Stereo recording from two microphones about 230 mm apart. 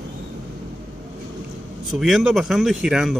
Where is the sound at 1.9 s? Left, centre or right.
Centre.